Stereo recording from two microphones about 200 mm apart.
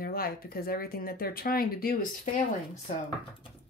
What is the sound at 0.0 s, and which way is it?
Speech, 50° left (ahead or behind).